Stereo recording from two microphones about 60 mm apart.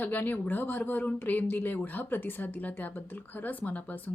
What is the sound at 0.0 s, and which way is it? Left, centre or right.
A woman's voice, left.